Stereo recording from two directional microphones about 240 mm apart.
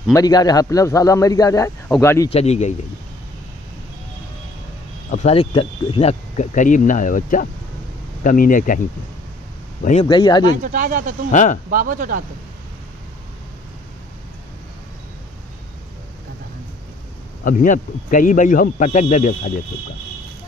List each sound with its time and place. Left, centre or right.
0.1 s a man's voice: centre
2.3 s speech: left
5.1 s speech: left
10.0 s a man's voice: centre
10.6 s speech: right
11.3 s speech: left
11.7 s speech: right
17.5 s speech: left